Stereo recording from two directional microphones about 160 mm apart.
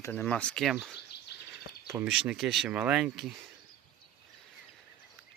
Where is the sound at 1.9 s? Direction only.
5° right (ahead or behind).